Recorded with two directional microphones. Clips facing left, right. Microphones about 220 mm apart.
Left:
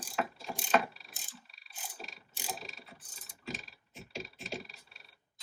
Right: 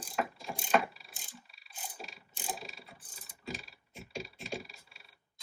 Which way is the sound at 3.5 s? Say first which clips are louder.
Even; 10° right (ahead or behind).